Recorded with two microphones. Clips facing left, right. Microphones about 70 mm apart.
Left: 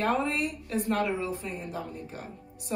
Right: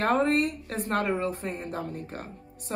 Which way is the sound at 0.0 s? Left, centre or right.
Right.